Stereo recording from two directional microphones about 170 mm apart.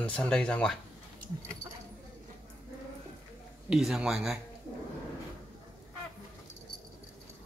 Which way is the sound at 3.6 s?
Centre (ahead or behind).